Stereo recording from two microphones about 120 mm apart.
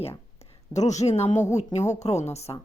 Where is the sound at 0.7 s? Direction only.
75° left (ahead or behind).